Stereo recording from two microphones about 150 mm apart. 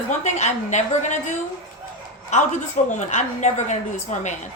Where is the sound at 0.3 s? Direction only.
50° left (ahead or behind).